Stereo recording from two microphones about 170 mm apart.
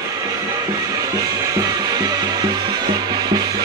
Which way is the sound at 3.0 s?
25° right (ahead or behind).